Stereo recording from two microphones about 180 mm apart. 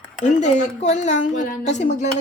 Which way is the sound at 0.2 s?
40° left (ahead or behind).